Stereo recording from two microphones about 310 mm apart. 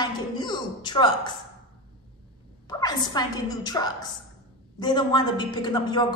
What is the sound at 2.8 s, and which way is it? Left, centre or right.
A woman's voice, centre.